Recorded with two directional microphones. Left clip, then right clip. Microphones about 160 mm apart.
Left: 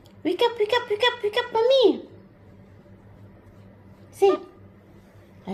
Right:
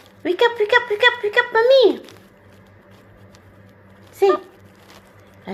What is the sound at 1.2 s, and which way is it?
Speech, 40° right (ahead or behind).